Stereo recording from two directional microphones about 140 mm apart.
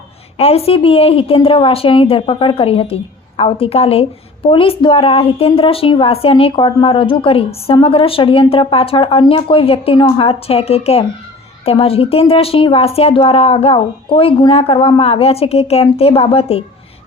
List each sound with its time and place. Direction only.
0.3 s a woman's voice: 45° left (ahead or behind)